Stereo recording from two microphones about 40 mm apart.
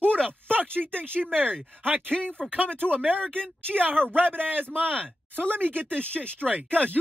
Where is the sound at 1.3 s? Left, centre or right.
Right.